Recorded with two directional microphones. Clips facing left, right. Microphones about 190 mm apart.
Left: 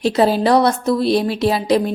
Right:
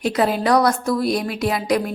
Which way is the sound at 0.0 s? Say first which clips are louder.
Left 4 dB; 30° left (ahead or behind).